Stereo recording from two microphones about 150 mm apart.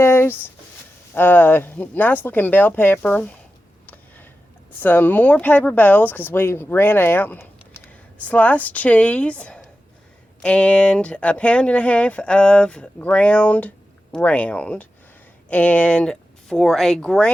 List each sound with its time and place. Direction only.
0.0 s a sound: 15° left (ahead or behind)
1.1 s speech: 15° left (ahead or behind)
3.8 s tick: 10° left (ahead or behind)
4.8 s speech: 10° left (ahead or behind)